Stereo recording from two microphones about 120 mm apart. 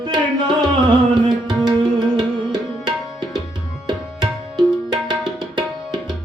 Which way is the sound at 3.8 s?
40° right (ahead or behind).